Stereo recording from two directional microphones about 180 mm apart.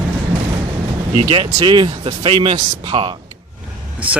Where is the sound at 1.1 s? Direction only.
25° right (ahead or behind).